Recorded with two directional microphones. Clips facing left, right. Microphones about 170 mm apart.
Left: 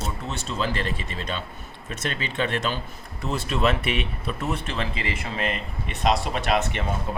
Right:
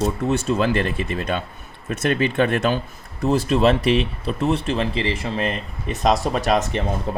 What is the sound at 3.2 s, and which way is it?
Speech, 40° right (ahead or behind).